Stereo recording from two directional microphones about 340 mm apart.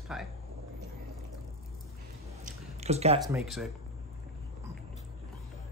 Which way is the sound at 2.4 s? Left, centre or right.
Centre.